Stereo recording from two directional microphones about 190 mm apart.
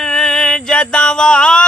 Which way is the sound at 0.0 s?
Centre (ahead or behind).